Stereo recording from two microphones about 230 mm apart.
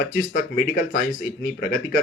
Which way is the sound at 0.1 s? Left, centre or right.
Left.